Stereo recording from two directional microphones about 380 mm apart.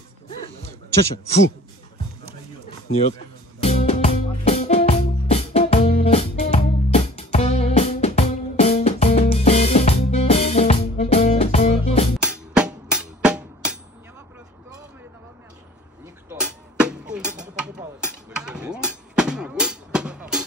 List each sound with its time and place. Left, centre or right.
2.9 s speech: centre
3.6 s music: centre
12.2 s music: centre
16.3 s music: centre